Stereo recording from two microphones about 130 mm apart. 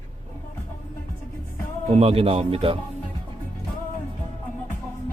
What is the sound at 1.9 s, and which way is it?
Speech, 50° right (ahead or behind).